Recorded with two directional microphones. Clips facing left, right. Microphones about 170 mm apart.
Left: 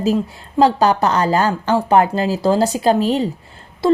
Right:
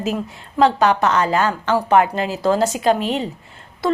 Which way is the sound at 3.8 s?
30° left (ahead or behind).